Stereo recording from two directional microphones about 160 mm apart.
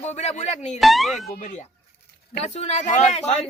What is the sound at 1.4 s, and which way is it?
Speech, 50° left (ahead or behind).